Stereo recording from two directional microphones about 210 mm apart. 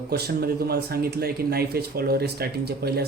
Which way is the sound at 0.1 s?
50° right (ahead or behind).